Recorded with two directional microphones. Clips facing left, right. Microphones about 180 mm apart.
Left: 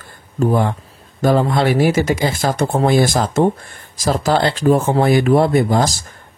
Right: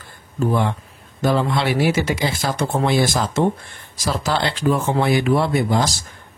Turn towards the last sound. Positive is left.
turn(degrees=45)  # may be behind; listen again after turning